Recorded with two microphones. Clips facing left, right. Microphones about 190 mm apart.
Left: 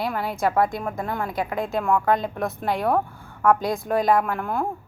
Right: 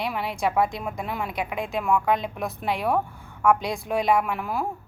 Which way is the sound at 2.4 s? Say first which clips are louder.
Left 2 dB; centre (ahead or behind).